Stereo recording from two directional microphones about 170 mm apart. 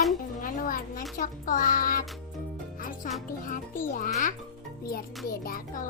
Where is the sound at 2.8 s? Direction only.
55° left (ahead or behind).